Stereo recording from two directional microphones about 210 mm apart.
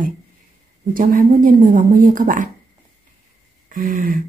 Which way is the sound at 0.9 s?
40° right (ahead or behind).